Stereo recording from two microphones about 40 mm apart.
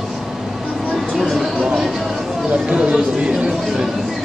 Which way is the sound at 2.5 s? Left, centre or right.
Right.